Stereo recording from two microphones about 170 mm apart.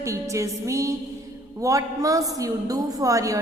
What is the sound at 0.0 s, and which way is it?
A woman's voice, 20° right (ahead or behind).